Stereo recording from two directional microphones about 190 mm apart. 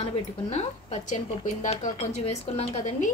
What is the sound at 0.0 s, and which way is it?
A woman's voice, 35° left (ahead or behind).